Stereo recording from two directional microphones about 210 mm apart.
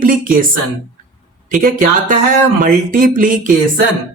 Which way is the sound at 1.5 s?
40° right (ahead or behind).